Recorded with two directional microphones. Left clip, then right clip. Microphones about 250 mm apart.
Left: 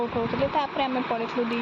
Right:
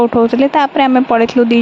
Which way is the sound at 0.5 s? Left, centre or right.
Right.